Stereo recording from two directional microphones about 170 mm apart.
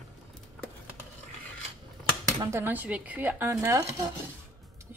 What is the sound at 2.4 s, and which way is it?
Speech, 15° right (ahead or behind).